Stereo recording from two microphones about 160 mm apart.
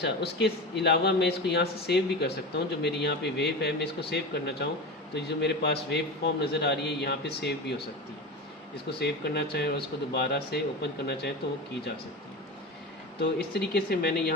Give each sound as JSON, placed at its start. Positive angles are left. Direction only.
{"t": 0.0, "sound": "speech", "side_deg": 90}
{"t": 9.0, "sound": "speech", "side_deg": 90}
{"t": 13.1, "sound": "speech", "side_deg": 90}